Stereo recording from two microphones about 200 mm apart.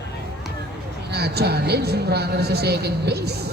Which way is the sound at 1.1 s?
55° right (ahead or behind).